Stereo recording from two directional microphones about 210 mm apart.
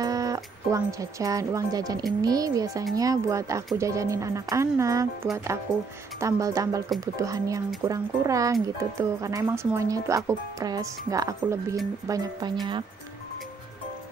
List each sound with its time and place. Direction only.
0.0 s speech: 15° right (ahead or behind)